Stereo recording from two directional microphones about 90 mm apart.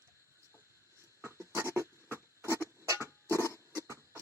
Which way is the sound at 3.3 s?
30° left (ahead or behind).